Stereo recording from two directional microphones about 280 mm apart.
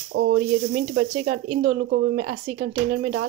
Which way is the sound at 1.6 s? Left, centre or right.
Right.